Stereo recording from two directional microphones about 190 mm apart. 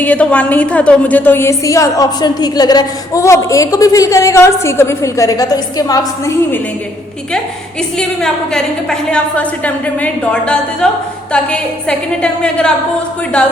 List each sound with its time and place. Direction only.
0.0 s a woman's voice: 5° left (ahead or behind)
7.9 s a woman's voice: 5° left (ahead or behind)